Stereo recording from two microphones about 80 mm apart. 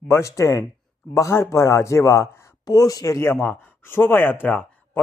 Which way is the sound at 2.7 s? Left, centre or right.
Left.